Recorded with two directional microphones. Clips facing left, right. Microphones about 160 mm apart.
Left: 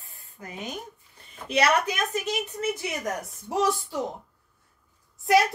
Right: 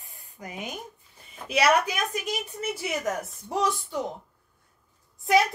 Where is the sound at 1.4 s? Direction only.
10° right (ahead or behind).